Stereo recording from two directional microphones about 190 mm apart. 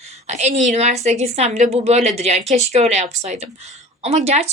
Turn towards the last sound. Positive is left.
turn(degrees=-35)  # may be behind; listen again after turning